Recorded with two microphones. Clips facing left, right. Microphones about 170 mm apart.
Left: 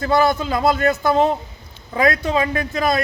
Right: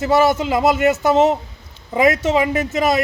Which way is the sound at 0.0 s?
20° right (ahead or behind).